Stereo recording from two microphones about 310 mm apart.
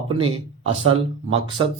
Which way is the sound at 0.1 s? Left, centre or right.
Centre.